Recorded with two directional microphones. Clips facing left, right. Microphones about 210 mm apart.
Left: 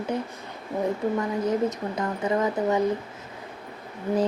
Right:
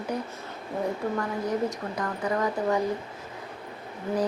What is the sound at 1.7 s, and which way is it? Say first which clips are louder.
Speech: left 3 dB; 20° left (ahead or behind).